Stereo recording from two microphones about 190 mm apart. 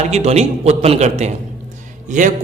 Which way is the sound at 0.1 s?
35° right (ahead or behind).